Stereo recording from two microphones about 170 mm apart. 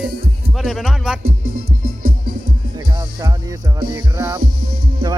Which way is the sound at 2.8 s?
20° right (ahead or behind).